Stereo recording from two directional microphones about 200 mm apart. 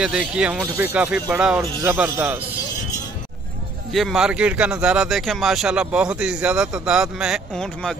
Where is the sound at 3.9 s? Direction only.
Centre (ahead or behind).